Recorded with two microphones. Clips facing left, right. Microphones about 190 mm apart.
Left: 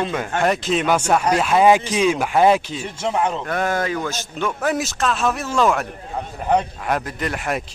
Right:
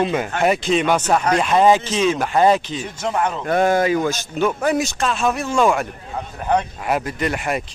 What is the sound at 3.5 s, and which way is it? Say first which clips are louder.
Speech: right 5 dB; 20° right (ahead or behind).